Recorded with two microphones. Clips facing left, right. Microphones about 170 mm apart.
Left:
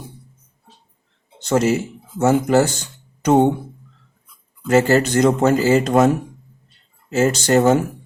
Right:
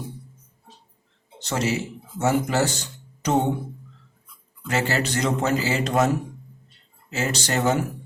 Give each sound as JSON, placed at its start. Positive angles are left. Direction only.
{"t": 1.4, "sound": "speech", "side_deg": 50}
{"t": 4.6, "sound": "speech", "side_deg": 45}
{"t": 7.1, "sound": "speech", "side_deg": 45}